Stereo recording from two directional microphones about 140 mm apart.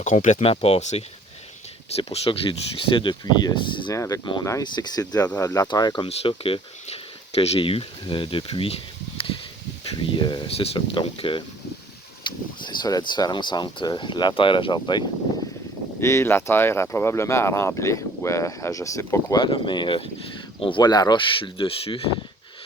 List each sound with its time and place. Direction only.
0.0 s speech: 60° left (ahead or behind); by 3.9 s 35° left (ahead or behind)
3.9 s speech: 25° left (ahead or behind)
6.1 s speech: 40° left (ahead or behind)
9.1 s a sound: 40° left (ahead or behind)
10.0 s speech: 35° left (ahead or behind)
12.6 s speech: 30° left (ahead or behind)
16.0 s speech: 20° left (ahead or behind); by 22.0 s 40° left (ahead or behind)